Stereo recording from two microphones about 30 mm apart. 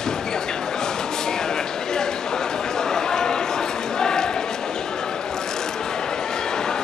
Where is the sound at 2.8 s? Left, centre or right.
Centre.